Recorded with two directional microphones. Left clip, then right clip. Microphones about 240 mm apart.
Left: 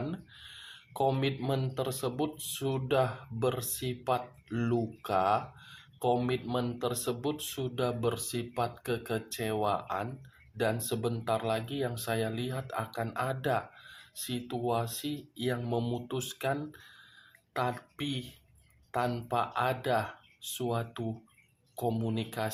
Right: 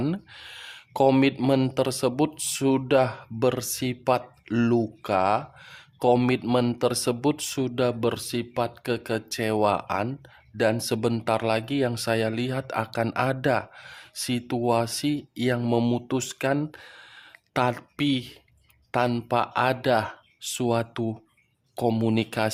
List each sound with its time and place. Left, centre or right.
0.1 s speech: right